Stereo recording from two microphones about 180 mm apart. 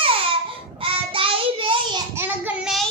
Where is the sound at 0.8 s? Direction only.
30° right (ahead or behind).